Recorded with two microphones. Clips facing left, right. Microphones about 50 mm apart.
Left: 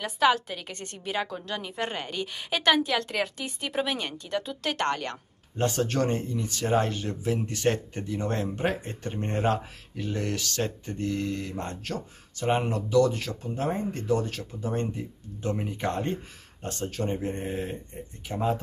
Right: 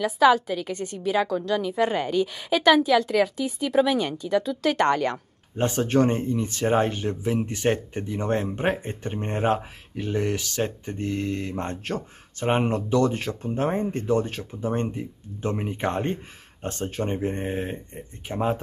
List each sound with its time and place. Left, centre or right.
0.0 s a woman's voice: centre
4.7 s a woman's voice: centre
5.6 s speech: right